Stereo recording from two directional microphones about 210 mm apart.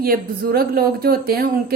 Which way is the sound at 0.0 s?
45° right (ahead or behind).